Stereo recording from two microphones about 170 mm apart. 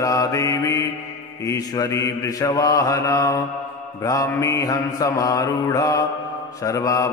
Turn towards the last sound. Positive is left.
turn(degrees=20)  # may be behind; listen again after turning